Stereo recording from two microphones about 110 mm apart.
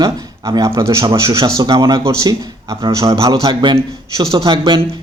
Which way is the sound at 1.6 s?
40° right (ahead or behind).